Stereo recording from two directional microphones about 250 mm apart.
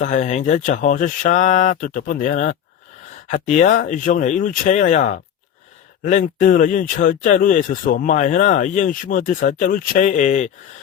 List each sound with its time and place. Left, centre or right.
0.0 s speech: left